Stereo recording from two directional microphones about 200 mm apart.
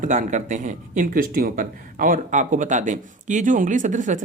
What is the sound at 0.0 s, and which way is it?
Speech, 40° right (ahead or behind).